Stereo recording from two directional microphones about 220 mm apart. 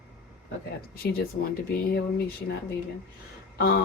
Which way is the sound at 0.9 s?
45° left (ahead or behind).